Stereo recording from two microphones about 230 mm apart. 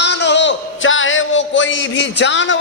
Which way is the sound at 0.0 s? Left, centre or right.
Left.